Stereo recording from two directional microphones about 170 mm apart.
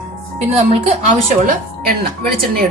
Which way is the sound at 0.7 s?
45° right (ahead or behind).